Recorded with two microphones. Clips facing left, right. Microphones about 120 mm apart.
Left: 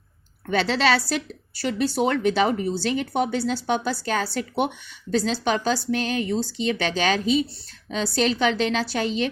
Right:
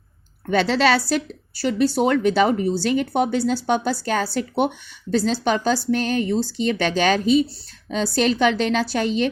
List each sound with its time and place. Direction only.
0.5 s a woman's voice: 45° right (ahead or behind)